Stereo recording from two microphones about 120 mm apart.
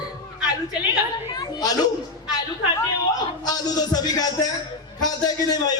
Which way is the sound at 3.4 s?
35° left (ahead or behind).